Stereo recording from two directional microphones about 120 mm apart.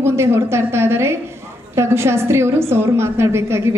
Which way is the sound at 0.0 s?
20° right (ahead or behind).